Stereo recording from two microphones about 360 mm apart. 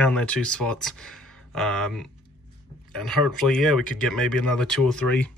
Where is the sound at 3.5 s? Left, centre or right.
Centre.